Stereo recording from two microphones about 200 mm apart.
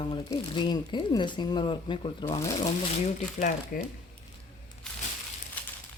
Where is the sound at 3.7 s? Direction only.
45° left (ahead or behind).